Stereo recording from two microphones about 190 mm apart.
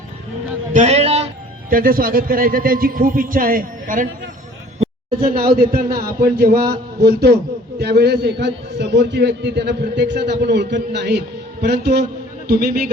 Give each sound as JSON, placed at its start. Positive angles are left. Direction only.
{"t": 0.7, "sound": "a man's voice", "side_deg": -35}
{"t": 1.7, "sound": "a man's voice", "side_deg": -50}
{"t": 5.4, "sound": "a man's voice", "side_deg": -55}